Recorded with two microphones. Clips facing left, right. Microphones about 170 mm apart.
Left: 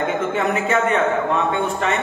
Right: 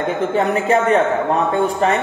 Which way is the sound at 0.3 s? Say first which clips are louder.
Right 4 dB; 35° right (ahead or behind).